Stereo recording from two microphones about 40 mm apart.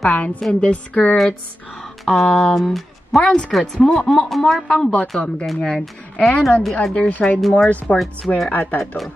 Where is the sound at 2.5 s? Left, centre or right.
Centre.